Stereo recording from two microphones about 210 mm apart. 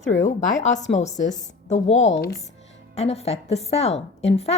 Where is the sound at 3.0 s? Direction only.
30° left (ahead or behind).